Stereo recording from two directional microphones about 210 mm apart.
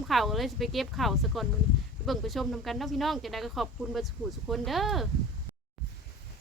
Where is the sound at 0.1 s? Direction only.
Centre (ahead or behind).